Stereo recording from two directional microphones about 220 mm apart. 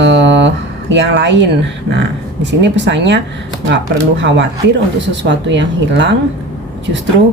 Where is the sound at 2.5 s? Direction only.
55° right (ahead or behind).